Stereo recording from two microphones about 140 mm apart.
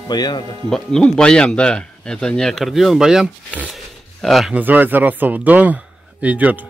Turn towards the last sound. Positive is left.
turn(degrees=-10)  # may be behind; listen again after turning